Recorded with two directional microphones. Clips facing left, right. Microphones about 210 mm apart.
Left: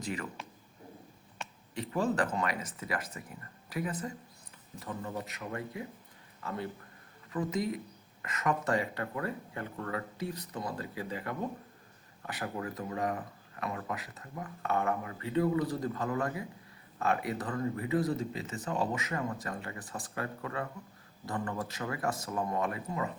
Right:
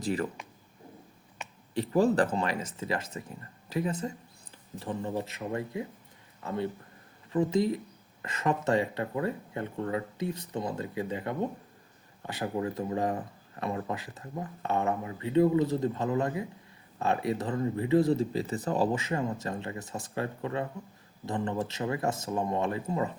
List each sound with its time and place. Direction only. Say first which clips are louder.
0.0 s speech: right 7 dB; 35° right (ahead or behind)
1.7 s speech: right 7 dB; 35° right (ahead or behind)